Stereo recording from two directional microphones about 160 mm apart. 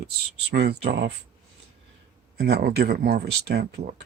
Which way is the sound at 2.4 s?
90° right.